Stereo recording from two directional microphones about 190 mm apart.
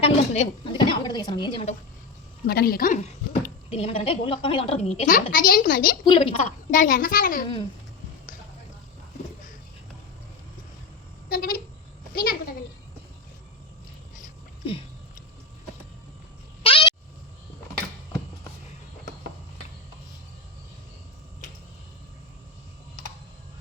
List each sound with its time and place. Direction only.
0.0 s a woman's voice: 30° left (ahead or behind)
2.5 s a child's voice: 55° left (ahead or behind)
6.1 s a woman's voice: 25° left (ahead or behind)
6.7 s a child's voice: 45° left (ahead or behind)
11.3 s speech: 50° left (ahead or behind)
12.1 s a sound: 50° left (ahead or behind)
16.6 s a sound: 30° left (ahead or behind)